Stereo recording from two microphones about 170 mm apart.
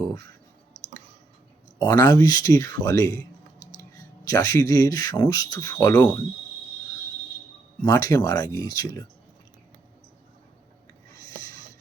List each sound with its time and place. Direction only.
1.8 s speech: 20° left (ahead or behind)
4.3 s speech: 20° left (ahead or behind)
7.9 s speech: 20° left (ahead or behind)